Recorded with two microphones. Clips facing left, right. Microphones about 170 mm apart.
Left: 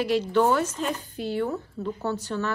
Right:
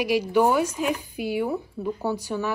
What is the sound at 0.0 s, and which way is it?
A woman's voice, 10° right (ahead or behind).